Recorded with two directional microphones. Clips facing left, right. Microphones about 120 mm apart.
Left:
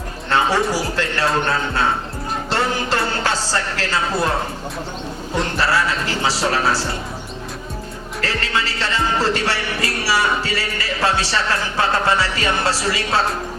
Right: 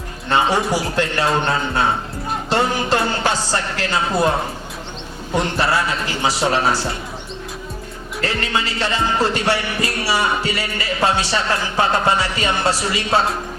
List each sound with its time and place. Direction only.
0.3 s a man's voice: 15° right (ahead or behind)
2.5 s music: 15° right (ahead or behind)
5.5 s music: 20° right (ahead or behind)
8.2 s music: 20° right (ahead or behind)